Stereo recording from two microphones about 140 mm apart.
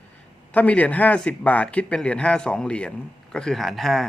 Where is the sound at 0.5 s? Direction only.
10° left (ahead or behind).